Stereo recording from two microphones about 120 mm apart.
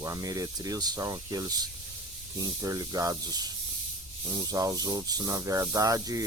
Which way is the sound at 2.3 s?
30° right (ahead or behind).